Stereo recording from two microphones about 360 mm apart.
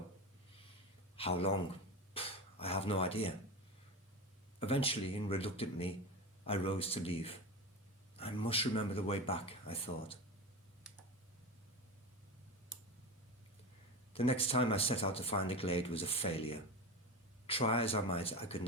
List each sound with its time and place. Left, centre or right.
1.1 s speech: centre
2.1 s a sound: centre
4.6 s speech: centre
14.1 s speech: centre